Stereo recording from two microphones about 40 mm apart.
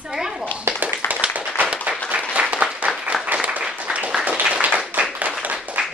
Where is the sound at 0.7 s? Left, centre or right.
Right.